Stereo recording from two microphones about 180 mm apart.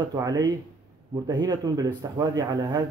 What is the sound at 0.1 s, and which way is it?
Speech, 20° right (ahead or behind).